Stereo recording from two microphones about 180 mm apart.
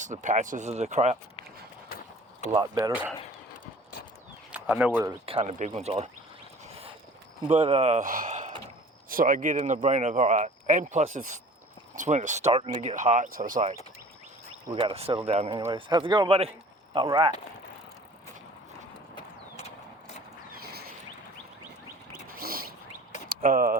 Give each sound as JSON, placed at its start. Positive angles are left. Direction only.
{"t": 0.0, "sound": "speech", "side_deg": -45}
{"t": 2.7, "sound": "speech", "side_deg": -10}
{"t": 4.5, "sound": "speech", "side_deg": -5}
{"t": 5.2, "sound": "speech", "side_deg": -35}
{"t": 7.4, "sound": "speech", "side_deg": -30}
{"t": 14.7, "sound": "a man's voice", "side_deg": -30}
{"t": 19.1, "sound": "clip-clop", "side_deg": 35}
{"t": 20.5, "sound": "a sound", "side_deg": -55}
{"t": 22.4, "sound": "a sound", "side_deg": -55}
{"t": 23.3, "sound": "speech", "side_deg": -50}